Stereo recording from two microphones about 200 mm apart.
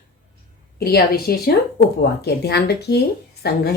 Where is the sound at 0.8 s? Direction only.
50° left (ahead or behind).